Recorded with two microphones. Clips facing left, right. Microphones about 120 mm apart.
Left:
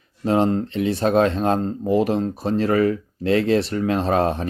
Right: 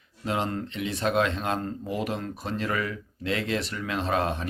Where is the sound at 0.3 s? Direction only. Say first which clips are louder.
Left 10 dB; 35° left (ahead or behind).